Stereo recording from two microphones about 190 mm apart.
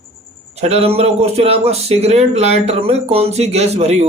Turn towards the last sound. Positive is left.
turn(degrees=-35)  # may be behind; listen again after turning